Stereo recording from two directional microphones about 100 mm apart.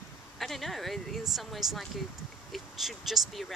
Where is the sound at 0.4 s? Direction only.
Centre (ahead or behind).